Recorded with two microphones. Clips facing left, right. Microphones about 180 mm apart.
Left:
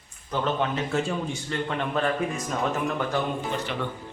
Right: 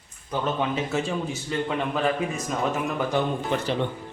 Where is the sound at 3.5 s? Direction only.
60° right (ahead or behind).